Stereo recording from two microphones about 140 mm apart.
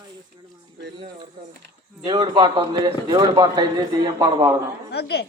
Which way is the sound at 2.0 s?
30° right (ahead or behind).